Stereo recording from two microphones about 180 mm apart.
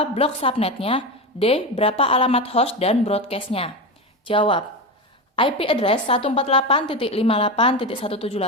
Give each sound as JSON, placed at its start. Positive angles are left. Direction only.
{"t": 0.0, "sound": "a woman's voice", "side_deg": 30}